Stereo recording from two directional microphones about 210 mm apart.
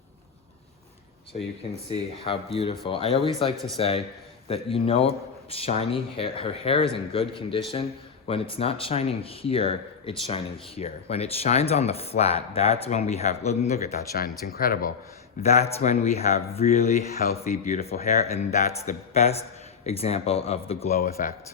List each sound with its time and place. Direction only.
2.2 s speech: 25° left (ahead or behind)
14.1 s speech: 45° left (ahead or behind)
15.4 s speech: 30° left (ahead or behind)
20.9 s speech: 45° left (ahead or behind)